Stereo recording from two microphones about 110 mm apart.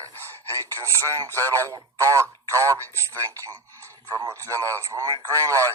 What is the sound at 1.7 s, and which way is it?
Speech, 30° right (ahead or behind).